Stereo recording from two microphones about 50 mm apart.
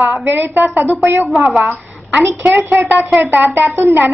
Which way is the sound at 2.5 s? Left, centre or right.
Right.